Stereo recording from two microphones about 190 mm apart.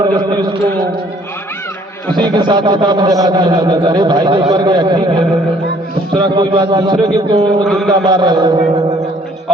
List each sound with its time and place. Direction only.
2.1 s a man's voice: 25° right (ahead or behind)
7.6 s a man's voice: centre (ahead or behind)
7.9 s a man's voice: 25° right (ahead or behind)